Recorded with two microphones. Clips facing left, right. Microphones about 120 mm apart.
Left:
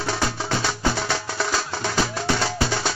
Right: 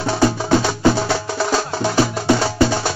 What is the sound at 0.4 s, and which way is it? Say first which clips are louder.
Music: right 8 dB; 15° right (ahead or behind).